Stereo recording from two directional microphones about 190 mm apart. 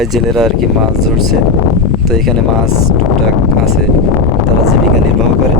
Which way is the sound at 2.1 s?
Centre (ahead or behind).